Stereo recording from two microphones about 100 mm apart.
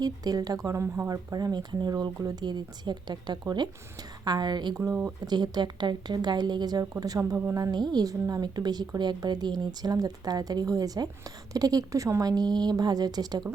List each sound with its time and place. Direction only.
0.0 s a woman's voice: 40° right (ahead or behind)
6.9 s a woman's voice: 35° right (ahead or behind)